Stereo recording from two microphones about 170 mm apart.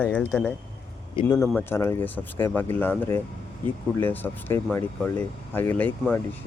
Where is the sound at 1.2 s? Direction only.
25° left (ahead or behind).